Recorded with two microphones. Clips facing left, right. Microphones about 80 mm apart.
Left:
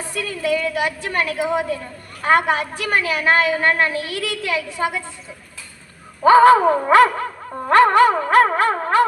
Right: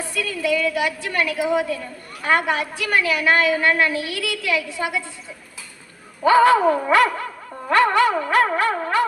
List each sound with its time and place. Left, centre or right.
0.1 s a woman's voice: left
6.2 s a woman's voice: left
6.6 s dog: left
6.9 s a woman's voice: left